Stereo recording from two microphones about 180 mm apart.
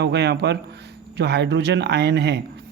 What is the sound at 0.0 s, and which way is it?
A man's voice, 70° right (ahead or behind).